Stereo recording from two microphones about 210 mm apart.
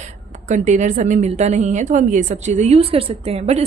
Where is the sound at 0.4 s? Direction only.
35° right (ahead or behind).